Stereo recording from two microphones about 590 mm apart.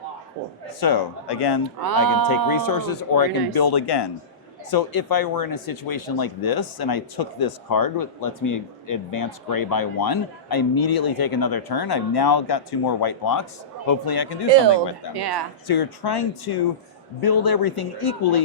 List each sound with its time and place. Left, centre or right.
0.8 s speech: left
1.8 s speech: right
2.5 s speech: left
15.1 s speech: right
15.6 s speech: left